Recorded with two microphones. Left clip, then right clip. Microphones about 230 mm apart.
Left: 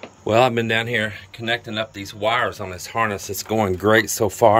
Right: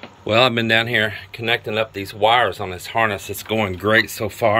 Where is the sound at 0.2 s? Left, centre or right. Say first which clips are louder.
Right 1 dB; centre.